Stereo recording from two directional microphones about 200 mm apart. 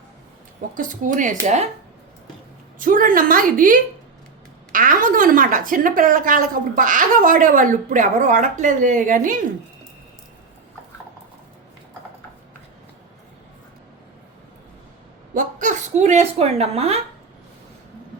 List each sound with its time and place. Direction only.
0.7 s a woman's voice: 40° right (ahead or behind)
2.7 s a woman's voice: 45° right (ahead or behind)
15.4 s a sound: 40° right (ahead or behind)